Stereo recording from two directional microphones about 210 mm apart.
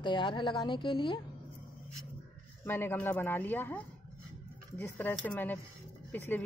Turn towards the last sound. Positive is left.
turn(degrees=10)  # may be behind; listen again after turning